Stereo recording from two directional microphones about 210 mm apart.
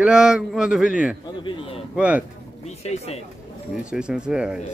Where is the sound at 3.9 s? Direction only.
5° right (ahead or behind).